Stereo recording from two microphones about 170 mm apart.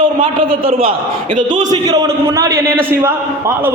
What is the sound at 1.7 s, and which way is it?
A man's voice, 20° right (ahead or behind).